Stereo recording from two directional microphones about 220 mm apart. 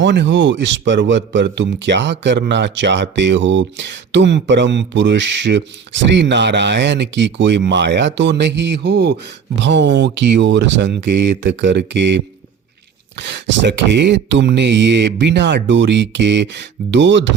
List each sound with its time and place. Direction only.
0.0 s speech: 55° right (ahead or behind)